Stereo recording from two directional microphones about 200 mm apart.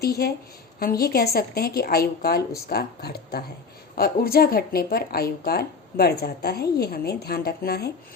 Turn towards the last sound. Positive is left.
turn(degrees=50)  # may be behind; listen again after turning